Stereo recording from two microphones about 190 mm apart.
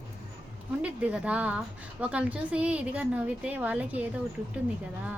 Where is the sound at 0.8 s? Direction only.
5° right (ahead or behind).